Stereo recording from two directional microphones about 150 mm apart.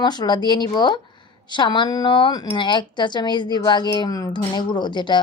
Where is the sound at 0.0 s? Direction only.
30° left (ahead or behind).